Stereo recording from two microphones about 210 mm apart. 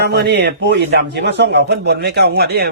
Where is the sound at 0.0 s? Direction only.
50° right (ahead or behind).